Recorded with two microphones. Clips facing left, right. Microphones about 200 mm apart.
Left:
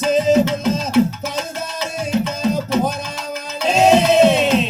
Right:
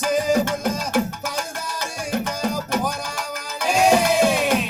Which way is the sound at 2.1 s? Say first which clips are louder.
Left 5 dB; 25° left (ahead or behind).